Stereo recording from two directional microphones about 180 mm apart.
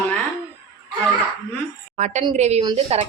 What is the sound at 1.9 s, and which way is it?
Speech, 40° right (ahead or behind).